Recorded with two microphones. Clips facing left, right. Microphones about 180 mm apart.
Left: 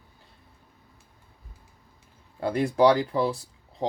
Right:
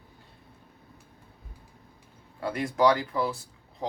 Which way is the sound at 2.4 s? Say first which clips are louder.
Left 4 dB; 30° left (ahead or behind).